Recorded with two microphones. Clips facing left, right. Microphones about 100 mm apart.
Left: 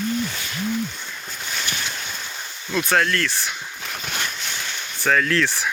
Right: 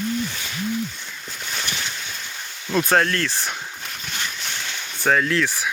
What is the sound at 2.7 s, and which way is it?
Speech, 30° right (ahead or behind).